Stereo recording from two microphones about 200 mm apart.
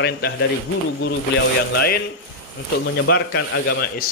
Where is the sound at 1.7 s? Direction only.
50° left (ahead or behind).